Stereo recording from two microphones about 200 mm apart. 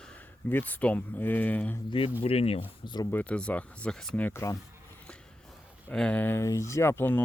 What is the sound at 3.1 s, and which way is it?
Speech, 5° left (ahead or behind).